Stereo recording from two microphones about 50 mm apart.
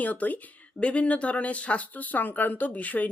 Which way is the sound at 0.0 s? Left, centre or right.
Left.